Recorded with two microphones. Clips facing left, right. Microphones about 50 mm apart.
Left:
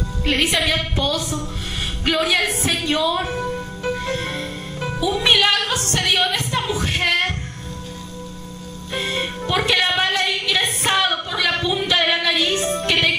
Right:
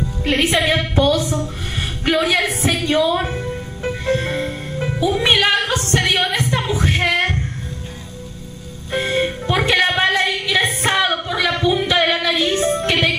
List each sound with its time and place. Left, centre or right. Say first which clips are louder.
0.2 s a woman's voice: right 2 dB; right
3.8 s music: right 4 dB; right
8.9 s music: right 5 dB; right